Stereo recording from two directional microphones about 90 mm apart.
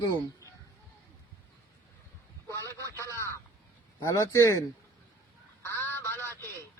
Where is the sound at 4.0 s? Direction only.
35° left (ahead or behind).